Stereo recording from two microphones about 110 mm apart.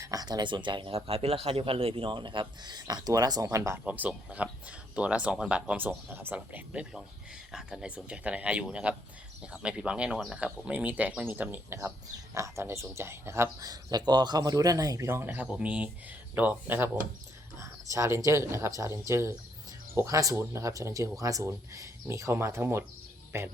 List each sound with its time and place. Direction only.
0.0 s speech: 35° right (ahead or behind)
3.8 s speech: 15° right (ahead or behind)